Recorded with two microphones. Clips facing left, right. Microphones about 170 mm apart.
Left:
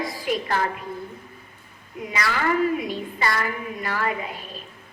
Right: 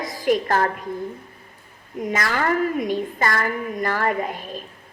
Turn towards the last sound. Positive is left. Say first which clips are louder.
# right 5 dB
turn(degrees=-45)  # may be behind; listen again after turning